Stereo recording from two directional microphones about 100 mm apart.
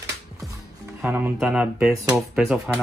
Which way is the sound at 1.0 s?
20° right (ahead or behind).